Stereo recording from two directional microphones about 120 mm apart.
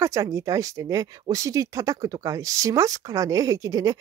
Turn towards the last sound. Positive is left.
turn(degrees=-30)  # may be behind; listen again after turning